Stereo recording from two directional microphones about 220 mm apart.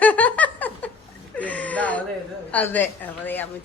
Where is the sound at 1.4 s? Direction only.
5° left (ahead or behind).